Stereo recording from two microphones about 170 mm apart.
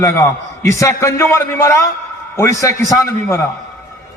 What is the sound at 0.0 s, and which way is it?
A man's voice, 20° left (ahead or behind).